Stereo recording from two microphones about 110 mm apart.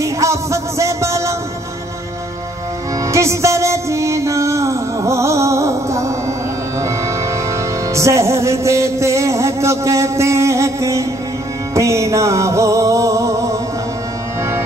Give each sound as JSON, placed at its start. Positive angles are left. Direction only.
{"t": 0.0, "sound": "music", "side_deg": -30}
{"t": 3.1, "sound": "music", "side_deg": -25}
{"t": 7.9, "sound": "music", "side_deg": -25}